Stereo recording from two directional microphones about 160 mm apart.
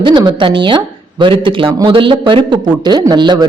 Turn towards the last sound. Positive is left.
turn(degrees=-25)  # may be behind; listen again after turning